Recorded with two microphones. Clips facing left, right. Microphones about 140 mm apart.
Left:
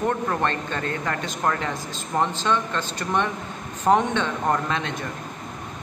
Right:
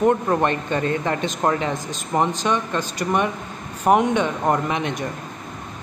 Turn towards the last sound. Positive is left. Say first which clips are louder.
# right 3 dB
turn(degrees=-15)  # may be behind; listen again after turning